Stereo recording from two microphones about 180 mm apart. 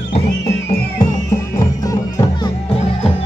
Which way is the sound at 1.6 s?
20° left (ahead or behind).